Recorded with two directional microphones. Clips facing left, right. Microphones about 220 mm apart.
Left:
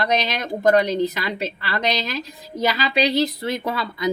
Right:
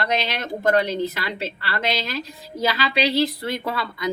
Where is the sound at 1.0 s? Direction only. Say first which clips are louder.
Left 3 dB; 15° left (ahead or behind).